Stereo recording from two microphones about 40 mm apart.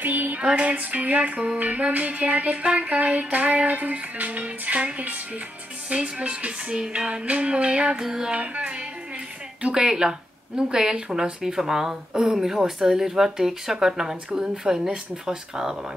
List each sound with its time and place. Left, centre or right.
0.0 s a sound: right
0.4 s music: right
2.6 s music: right
8.0 s speech: centre
8.4 s music: right
9.8 s speech: centre